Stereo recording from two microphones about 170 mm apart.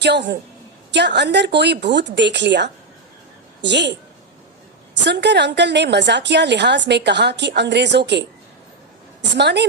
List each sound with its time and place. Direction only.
0.0 s a woman's voice: 90° right
5.0 s a woman's voice: 90° right
9.3 s a woman's voice: 90° right